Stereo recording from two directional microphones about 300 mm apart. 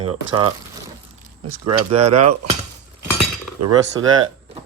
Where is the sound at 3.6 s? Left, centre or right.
Right.